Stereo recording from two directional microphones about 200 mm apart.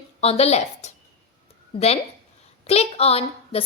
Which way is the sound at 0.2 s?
30° left (ahead or behind).